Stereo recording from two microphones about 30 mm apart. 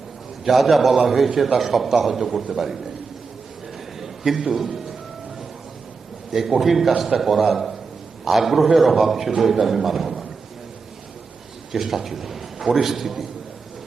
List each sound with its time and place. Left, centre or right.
0.4 s a man's voice: centre
4.0 s a sound: centre
4.4 s a man's voice: centre
6.3 s a man's voice: centre
11.7 s a man's voice: centre